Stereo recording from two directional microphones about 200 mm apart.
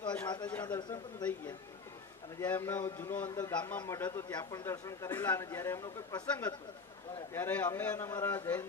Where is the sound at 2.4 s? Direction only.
10° left (ahead or behind).